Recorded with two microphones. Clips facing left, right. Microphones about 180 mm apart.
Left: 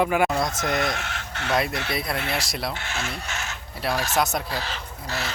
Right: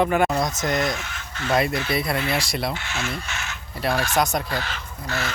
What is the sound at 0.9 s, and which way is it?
Fowl, 65° left (ahead or behind).